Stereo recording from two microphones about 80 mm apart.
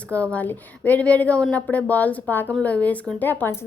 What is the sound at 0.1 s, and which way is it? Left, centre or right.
A woman's voice, centre.